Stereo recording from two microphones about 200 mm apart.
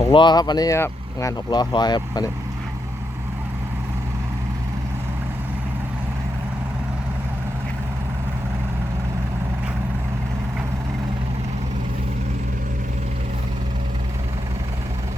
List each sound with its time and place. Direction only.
0.0 s speech: 25° left (ahead or behind)